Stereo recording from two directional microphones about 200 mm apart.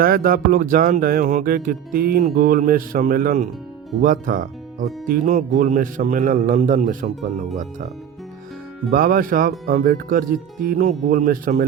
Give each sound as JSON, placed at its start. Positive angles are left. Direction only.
{"t": 0.0, "sound": "music", "side_deg": -45}
{"t": 4.0, "sound": "speech", "side_deg": -40}
{"t": 8.9, "sound": "music", "side_deg": -45}